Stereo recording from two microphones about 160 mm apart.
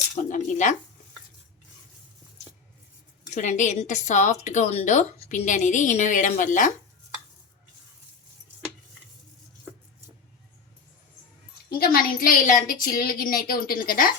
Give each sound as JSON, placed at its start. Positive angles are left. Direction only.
{"t": 0.2, "sound": "a sound", "side_deg": 50}
{"t": 3.2, "sound": "speech", "side_deg": 50}
{"t": 11.8, "sound": "a woman's voice", "side_deg": 65}